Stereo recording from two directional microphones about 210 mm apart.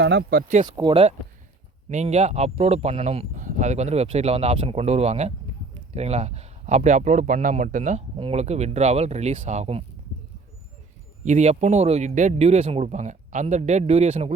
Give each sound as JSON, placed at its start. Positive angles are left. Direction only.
{"t": 0.0, "sound": "speech", "side_deg": -55}
{"t": 0.6, "sound": "speech", "side_deg": -20}
{"t": 11.3, "sound": "speech", "side_deg": -35}